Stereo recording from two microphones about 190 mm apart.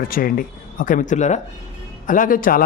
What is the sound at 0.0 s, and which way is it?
Speech, 50° left (ahead or behind).